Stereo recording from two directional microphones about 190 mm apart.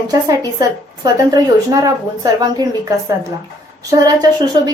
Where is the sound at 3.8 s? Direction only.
20° right (ahead or behind).